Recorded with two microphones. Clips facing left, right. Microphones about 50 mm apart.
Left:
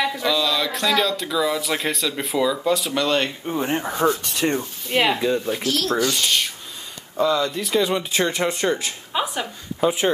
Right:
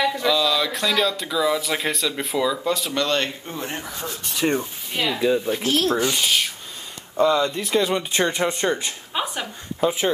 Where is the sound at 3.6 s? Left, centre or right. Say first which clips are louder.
Left 8 dB; left.